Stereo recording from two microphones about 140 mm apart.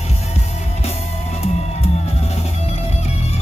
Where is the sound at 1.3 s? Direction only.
50° left (ahead or behind).